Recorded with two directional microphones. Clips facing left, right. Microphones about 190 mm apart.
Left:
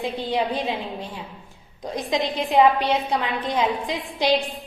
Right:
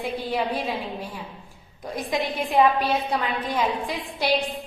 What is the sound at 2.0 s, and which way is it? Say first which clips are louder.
A woman's voice: left 2 dB; 20° left (ahead or behind).